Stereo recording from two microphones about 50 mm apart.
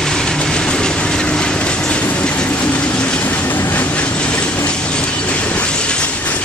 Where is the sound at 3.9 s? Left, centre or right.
Left.